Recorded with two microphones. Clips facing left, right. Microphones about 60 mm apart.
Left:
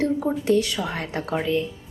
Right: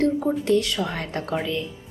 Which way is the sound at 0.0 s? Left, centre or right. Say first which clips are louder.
Right 1 dB; centre.